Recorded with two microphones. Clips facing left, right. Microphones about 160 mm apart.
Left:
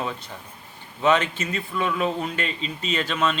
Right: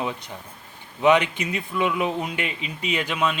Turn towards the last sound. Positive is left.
turn(degrees=-10)  # may be behind; listen again after turning